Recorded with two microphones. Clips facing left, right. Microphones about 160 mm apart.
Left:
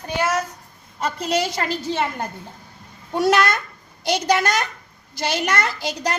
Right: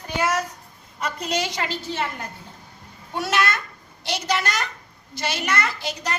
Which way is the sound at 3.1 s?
40° left (ahead or behind).